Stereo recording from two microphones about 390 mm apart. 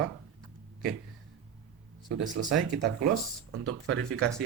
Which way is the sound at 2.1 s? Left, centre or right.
Centre.